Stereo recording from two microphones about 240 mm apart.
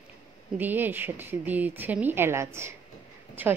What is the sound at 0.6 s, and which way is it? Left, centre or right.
Speech, centre.